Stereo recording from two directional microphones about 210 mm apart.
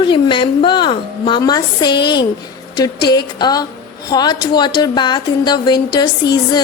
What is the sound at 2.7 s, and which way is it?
A woman's voice, 20° left (ahead or behind).